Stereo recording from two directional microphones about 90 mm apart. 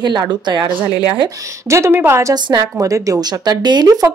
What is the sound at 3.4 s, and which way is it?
Speech, 55° right (ahead or behind).